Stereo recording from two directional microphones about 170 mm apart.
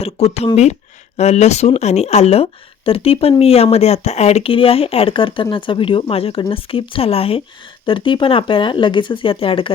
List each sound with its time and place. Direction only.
0.0 s speech: 35° left (ahead or behind)